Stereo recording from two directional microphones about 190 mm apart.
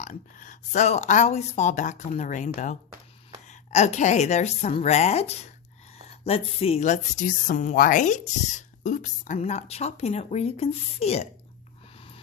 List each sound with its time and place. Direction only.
0.0 s a woman's voice: 40° left (ahead or behind)
11.9 s snort: 30° left (ahead or behind)